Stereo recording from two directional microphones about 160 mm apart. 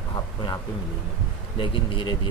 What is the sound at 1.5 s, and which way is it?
Speech, 35° left (ahead or behind).